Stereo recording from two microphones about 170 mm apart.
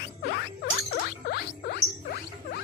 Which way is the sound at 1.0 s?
65° left (ahead or behind).